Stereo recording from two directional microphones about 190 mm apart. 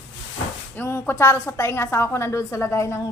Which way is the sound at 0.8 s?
10° left (ahead or behind).